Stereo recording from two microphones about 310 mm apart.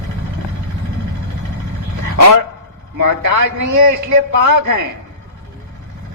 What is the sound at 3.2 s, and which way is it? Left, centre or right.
A man's voice, right.